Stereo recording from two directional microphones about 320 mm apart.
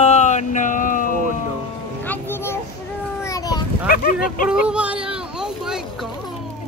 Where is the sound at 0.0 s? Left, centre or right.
Left.